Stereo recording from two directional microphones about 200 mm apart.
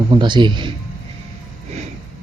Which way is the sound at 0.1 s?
25° right (ahead or behind).